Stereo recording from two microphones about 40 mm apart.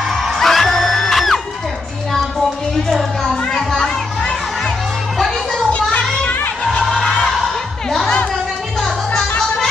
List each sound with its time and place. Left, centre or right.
0.2 s music: centre
3.5 s children playing: centre
5.7 s children playing: left
6.7 s music: centre